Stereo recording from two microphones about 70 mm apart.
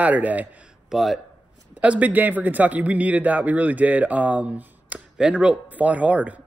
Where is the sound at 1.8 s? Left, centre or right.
Right.